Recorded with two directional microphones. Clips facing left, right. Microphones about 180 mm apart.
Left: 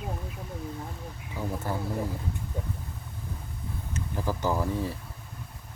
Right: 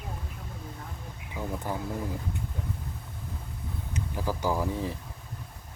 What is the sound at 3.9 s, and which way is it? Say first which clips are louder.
Speech: even; 10° right (ahead or behind).